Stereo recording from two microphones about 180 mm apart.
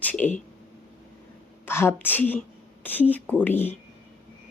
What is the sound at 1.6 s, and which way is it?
Speech, 15° left (ahead or behind).